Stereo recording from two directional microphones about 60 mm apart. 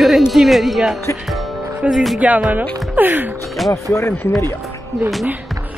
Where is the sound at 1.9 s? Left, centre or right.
Centre.